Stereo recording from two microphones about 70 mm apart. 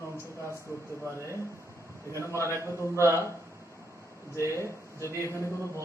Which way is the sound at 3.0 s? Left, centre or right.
Right.